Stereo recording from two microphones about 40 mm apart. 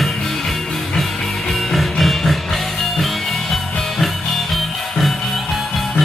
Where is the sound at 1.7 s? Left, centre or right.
Centre.